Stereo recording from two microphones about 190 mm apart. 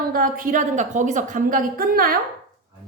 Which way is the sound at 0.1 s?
50° right (ahead or behind).